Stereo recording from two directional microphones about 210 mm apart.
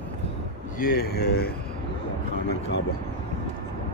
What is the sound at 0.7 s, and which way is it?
Speech, 45° left (ahead or behind).